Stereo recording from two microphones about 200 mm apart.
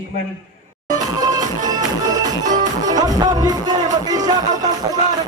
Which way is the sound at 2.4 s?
40° right (ahead or behind).